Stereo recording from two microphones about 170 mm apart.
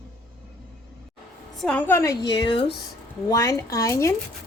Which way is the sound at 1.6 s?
10° left (ahead or behind).